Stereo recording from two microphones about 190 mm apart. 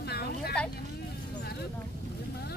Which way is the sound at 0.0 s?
55° left (ahead or behind).